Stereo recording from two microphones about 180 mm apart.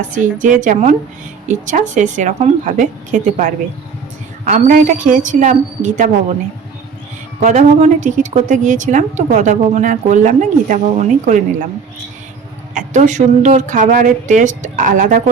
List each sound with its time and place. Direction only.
0.0 s a woman's voice: 45° right (ahead or behind)
7.4 s a woman's voice: 40° right (ahead or behind)
12.7 s a woman's voice: 40° right (ahead or behind)